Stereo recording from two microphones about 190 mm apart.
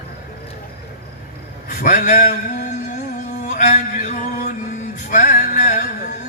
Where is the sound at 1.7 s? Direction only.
45° left (ahead or behind).